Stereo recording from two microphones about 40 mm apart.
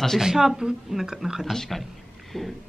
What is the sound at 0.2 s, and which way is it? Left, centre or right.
A woman's voice, centre.